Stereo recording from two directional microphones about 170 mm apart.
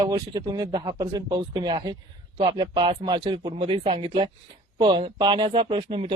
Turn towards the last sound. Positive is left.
turn(degrees=-30)  # may be behind; listen again after turning